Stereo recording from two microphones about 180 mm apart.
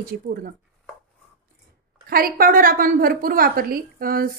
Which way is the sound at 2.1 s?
55° right (ahead or behind).